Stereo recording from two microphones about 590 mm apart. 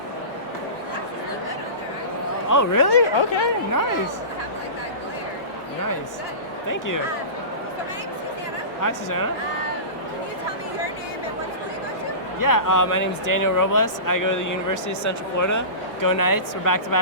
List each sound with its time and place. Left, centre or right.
2.5 s speech: left
6.7 s speech: left
8.8 s speech: left
12.4 s speech: left